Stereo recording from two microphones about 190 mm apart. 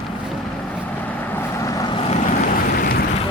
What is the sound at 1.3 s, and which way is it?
Vehicle, 15° left (ahead or behind).